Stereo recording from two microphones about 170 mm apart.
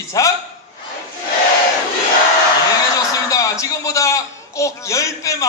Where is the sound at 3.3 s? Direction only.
20° left (ahead or behind).